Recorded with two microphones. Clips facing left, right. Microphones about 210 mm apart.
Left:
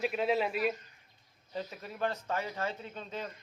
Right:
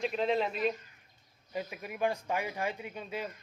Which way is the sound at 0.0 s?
5° left (ahead or behind).